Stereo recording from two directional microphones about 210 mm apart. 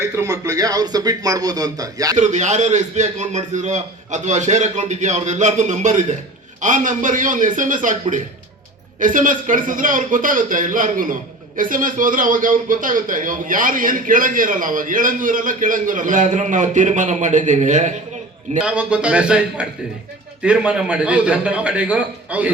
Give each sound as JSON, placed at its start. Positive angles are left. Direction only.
{"t": 0.0, "sound": "speech", "side_deg": -15}
{"t": 2.1, "sound": "speech", "side_deg": -35}
{"t": 18.6, "sound": "a man's voice", "side_deg": -5}